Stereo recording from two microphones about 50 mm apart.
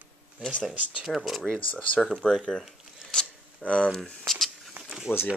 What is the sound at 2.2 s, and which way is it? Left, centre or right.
Speech, centre.